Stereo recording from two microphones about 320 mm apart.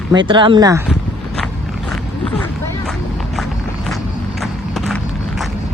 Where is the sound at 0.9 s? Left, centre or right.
Centre.